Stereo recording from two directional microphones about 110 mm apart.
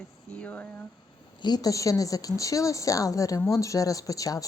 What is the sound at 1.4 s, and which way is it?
A woman's voice, 40° left (ahead or behind).